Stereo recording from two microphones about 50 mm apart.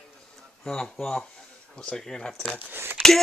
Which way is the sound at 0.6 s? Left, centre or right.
Centre.